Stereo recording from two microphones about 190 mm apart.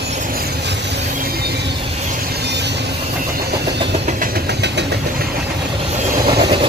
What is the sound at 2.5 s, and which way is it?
Vehicle, 65° right (ahead or behind).